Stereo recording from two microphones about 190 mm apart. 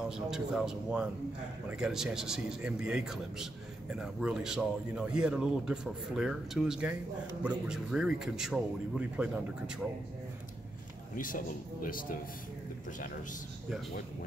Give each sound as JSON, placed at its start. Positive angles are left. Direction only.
{"t": 0.0, "sound": "speech", "side_deg": -5}
{"t": 11.1, "sound": "a man's voice", "side_deg": 45}